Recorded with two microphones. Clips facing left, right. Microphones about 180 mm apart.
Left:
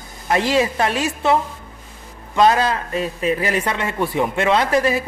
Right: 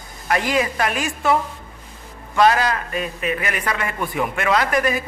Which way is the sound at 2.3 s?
25° left (ahead or behind).